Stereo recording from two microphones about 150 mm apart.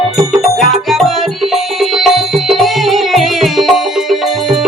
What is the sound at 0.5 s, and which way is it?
Music, centre (ahead or behind).